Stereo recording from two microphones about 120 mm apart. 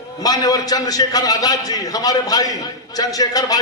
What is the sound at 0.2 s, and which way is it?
A man's voice, 30° left (ahead or behind).